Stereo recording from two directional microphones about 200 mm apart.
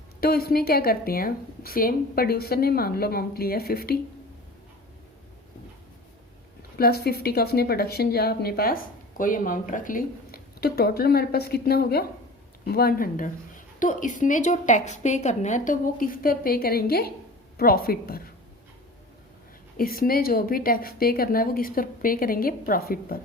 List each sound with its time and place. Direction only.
0.2 s speech: 50° left (ahead or behind)
6.7 s a woman's voice: 50° left (ahead or behind)
19.7 s speech: 45° left (ahead or behind)